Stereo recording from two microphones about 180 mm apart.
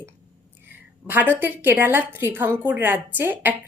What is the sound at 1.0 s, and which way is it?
A woman's voice, 10° right (ahead or behind).